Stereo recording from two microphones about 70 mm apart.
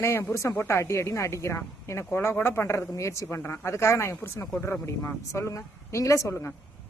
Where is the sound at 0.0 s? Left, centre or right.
Left.